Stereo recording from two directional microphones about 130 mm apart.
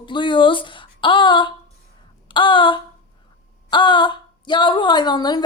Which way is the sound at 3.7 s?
35° left (ahead or behind).